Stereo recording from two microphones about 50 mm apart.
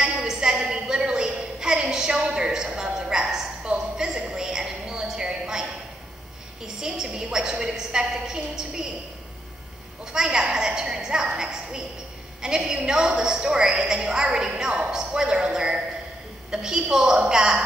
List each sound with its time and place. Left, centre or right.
0.0 s a sound: centre
6.8 s a woman's voice: centre
10.1 s a woman's voice: centre